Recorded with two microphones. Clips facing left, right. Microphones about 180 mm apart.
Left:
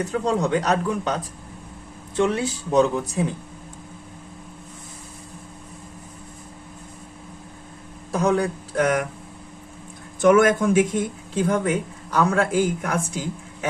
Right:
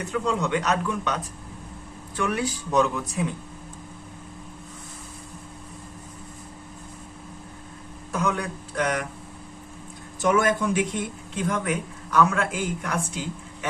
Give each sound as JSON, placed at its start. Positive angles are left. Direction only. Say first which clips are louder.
{"t": 0.0, "sound": "speech", "louder": "left 3 dB", "side_deg": 35}
{"t": 8.1, "sound": "speech", "louder": "left 6 dB", "side_deg": 35}
{"t": 10.2, "sound": "speech", "louder": "left 6 dB", "side_deg": 55}
{"t": 11.3, "sound": "speech", "louder": "left 5 dB", "side_deg": 30}